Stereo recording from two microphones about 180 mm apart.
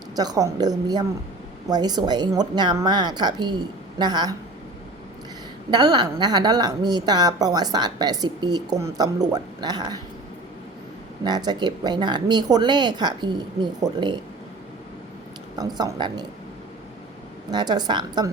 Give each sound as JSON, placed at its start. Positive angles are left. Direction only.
{"t": 0.2, "sound": "a woman's voice", "side_deg": -20}
{"t": 5.7, "sound": "a woman's voice", "side_deg": -25}
{"t": 11.2, "sound": "a woman's voice", "side_deg": -25}
{"t": 15.5, "sound": "a woman's voice", "side_deg": -20}
{"t": 17.5, "sound": "a woman's voice", "side_deg": -25}